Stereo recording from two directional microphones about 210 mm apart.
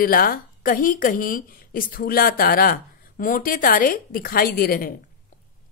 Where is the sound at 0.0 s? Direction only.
45° left (ahead or behind).